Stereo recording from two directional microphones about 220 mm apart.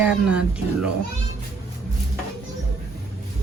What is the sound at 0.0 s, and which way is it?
Speech, 5° right (ahead or behind).